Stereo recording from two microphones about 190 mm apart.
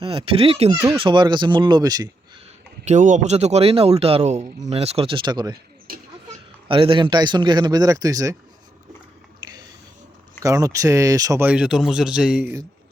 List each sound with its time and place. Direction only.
0.0 s a man's voice: 25° right (ahead or behind)
2.8 s a man's voice: 40° right (ahead or behind); by 5.5 s 20° right (ahead or behind)
6.7 s a man's voice: 25° right (ahead or behind)
10.4 s speech: 15° right (ahead or behind)